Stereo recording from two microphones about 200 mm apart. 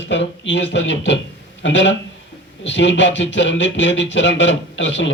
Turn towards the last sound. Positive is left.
turn(degrees=65)  # may be behind; listen again after turning